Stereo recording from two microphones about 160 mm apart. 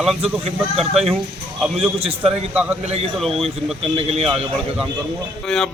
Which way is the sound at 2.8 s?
40° right (ahead or behind).